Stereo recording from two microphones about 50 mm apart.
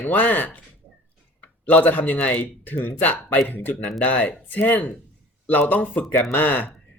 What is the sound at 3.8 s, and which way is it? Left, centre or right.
Speech, centre.